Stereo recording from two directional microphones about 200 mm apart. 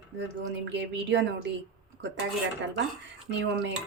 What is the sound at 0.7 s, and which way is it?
Speech, 60° right (ahead or behind).